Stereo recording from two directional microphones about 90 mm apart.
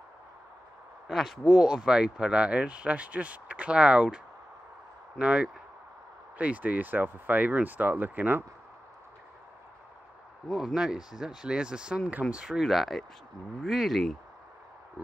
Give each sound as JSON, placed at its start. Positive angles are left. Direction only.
{"t": 1.0, "sound": "speech", "side_deg": 0}
{"t": 5.2, "sound": "speech", "side_deg": -15}
{"t": 10.5, "sound": "speech", "side_deg": -5}